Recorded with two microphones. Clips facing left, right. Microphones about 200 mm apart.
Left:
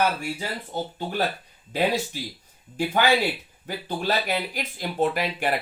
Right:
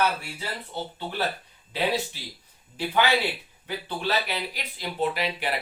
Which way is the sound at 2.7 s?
45° left (ahead or behind).